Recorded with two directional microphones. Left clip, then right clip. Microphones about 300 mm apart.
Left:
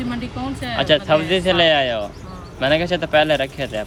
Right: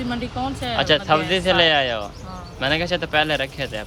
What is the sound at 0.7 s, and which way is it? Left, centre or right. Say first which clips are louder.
Speech: left 2 dB; centre.